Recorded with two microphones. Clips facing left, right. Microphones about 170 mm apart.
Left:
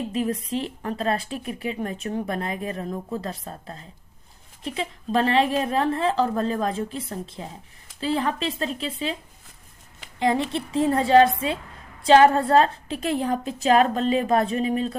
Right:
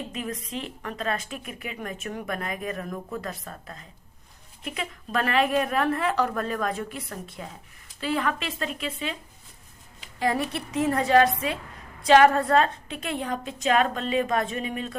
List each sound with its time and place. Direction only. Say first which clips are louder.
0.1 s a woman's voice: left 7 dB; 35° left (ahead or behind)
10.2 s a woman's voice: left 3 dB; 25° left (ahead or behind)